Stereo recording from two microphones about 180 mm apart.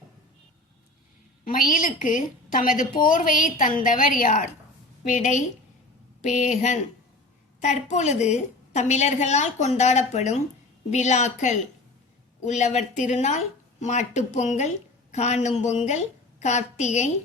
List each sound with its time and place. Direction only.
1.5 s a woman's voice: 50° left (ahead or behind)
7.6 s a woman's voice: 40° left (ahead or behind)